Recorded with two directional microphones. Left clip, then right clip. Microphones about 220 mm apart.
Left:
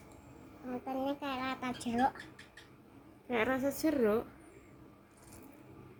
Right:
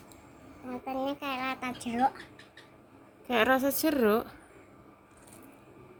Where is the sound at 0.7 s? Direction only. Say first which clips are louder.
Right 3 dB; 20° right (ahead or behind).